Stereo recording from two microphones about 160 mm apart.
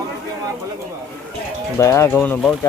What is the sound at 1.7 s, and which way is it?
Speech, 20° left (ahead or behind).